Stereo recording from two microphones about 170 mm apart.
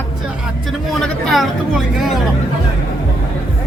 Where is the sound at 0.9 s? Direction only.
Centre (ahead or behind).